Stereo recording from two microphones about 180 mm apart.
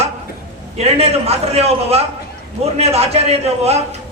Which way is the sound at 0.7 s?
35° right (ahead or behind).